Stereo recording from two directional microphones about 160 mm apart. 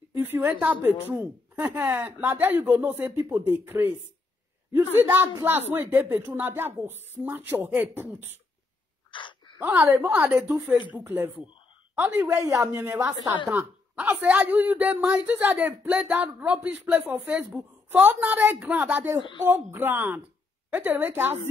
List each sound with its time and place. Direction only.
0.1 s a man's voice: 15° right (ahead or behind)
5.0 s a man's voice: 15° right (ahead or behind)
9.1 s gasp: 30° left (ahead or behind)
9.6 s a man's voice: 10° right (ahead or behind)